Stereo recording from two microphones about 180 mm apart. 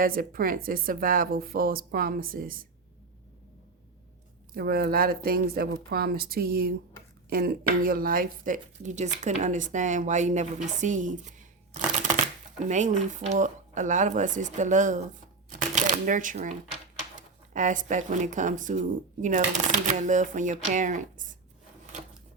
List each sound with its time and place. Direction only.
0.0 s speech: 50° right (ahead or behind)
4.5 s speech: 60° right (ahead or behind)